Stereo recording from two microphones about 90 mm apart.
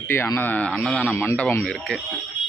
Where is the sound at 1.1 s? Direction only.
30° left (ahead or behind).